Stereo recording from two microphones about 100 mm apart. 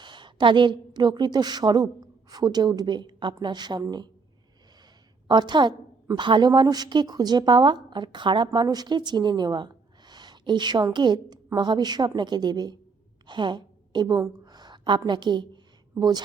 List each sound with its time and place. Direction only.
0.0 s a woman's voice: 50° right (ahead or behind)
5.3 s a woman's voice: 50° right (ahead or behind)
13.2 s a sound: 50° right (ahead or behind)